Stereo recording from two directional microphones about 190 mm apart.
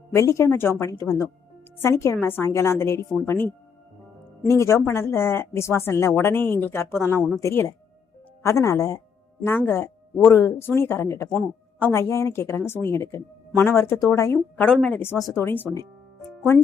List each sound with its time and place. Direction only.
0.1 s speech: 15° left (ahead or behind)